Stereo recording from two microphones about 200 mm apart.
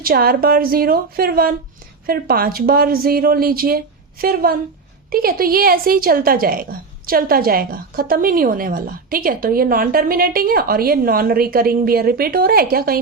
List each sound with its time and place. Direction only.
0.0 s a woman's voice: 45° right (ahead or behind)